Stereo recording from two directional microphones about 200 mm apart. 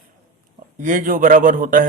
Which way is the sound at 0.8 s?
40° right (ahead or behind).